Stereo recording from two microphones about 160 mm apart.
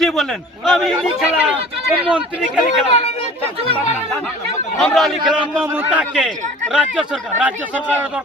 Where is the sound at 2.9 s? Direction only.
40° left (ahead or behind).